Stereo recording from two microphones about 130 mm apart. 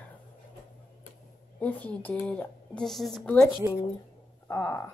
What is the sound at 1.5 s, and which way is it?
Speech, 10° left (ahead or behind).